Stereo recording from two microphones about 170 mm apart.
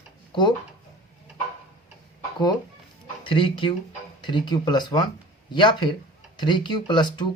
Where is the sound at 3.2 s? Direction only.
30° left (ahead or behind).